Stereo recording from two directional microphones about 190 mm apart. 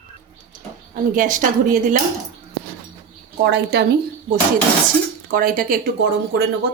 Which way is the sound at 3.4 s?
60° right (ahead or behind).